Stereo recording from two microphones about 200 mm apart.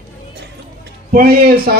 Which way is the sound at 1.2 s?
50° right (ahead or behind).